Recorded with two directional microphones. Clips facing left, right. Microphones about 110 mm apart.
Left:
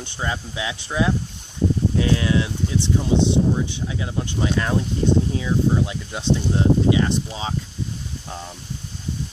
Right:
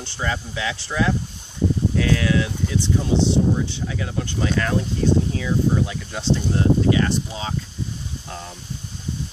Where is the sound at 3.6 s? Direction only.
20° left (ahead or behind).